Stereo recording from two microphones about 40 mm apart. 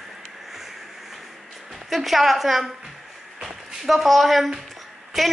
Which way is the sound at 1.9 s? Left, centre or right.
Centre.